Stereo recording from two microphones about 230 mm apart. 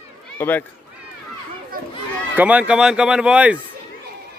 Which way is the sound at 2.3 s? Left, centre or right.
Centre.